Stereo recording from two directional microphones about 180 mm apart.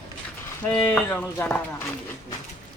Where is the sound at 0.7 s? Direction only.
5° left (ahead or behind).